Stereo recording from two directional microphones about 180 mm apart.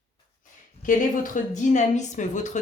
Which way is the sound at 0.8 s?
45° left (ahead or behind).